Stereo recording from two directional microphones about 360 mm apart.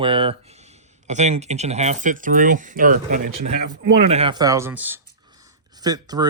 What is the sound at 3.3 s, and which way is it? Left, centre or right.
Speech, right.